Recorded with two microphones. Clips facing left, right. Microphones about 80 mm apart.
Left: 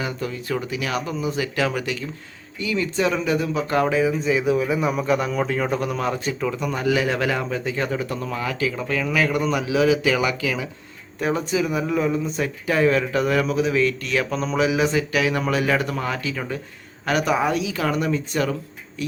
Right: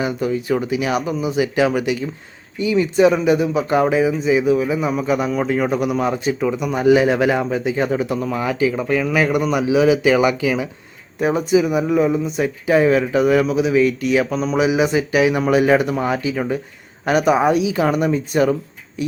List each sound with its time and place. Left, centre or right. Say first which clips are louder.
0.0 s speech: right 7 dB; centre